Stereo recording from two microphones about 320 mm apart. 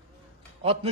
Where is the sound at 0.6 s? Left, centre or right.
Centre.